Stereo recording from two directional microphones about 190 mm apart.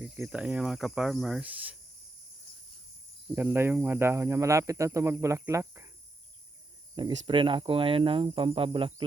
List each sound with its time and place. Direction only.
0.2 s speech: 5° right (ahead or behind)
3.3 s speech: 10° right (ahead or behind)
6.9 s cricket: 25° right (ahead or behind)